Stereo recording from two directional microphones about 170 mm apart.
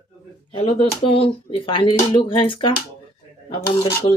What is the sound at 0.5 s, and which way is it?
Speech, 35° left (ahead or behind).